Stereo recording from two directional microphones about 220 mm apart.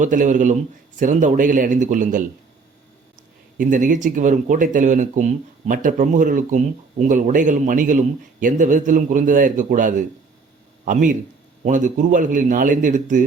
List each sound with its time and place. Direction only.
0.0 s speech: 35° right (ahead or behind)
3.6 s speech: 35° right (ahead or behind)